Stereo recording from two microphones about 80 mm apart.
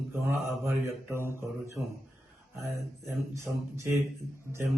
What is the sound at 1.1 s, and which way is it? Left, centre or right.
Speech, right.